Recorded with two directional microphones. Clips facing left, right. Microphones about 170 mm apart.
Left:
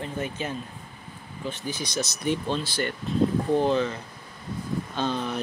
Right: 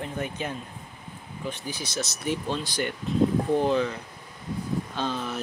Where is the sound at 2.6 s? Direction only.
15° right (ahead or behind).